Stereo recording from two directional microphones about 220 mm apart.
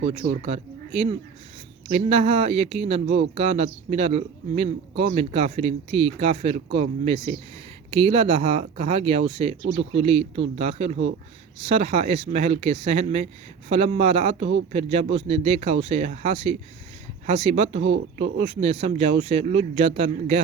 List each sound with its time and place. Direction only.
0.0 s speech: 30° right (ahead or behind)